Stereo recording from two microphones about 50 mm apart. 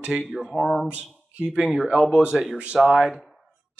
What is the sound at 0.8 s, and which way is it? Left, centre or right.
Speech, right.